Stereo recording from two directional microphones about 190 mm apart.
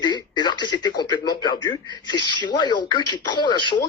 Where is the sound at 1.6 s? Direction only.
20° left (ahead or behind).